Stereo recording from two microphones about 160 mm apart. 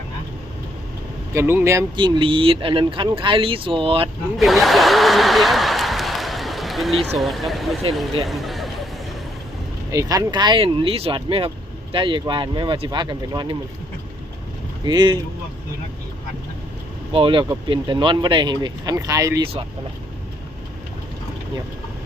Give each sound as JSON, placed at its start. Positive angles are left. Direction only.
{"t": 1.3, "sound": "speech", "side_deg": -15}
{"t": 2.0, "sound": "speech", "side_deg": -30}
{"t": 4.4, "sound": "a sound", "side_deg": 0}
{"t": 7.2, "sound": "speech", "side_deg": 0}
{"t": 9.9, "sound": "speech", "side_deg": -20}
{"t": 14.8, "sound": "speech", "side_deg": -25}
{"t": 17.1, "sound": "speech", "side_deg": -35}